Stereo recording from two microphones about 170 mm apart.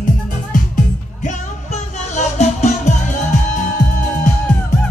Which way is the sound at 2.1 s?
40° left (ahead or behind).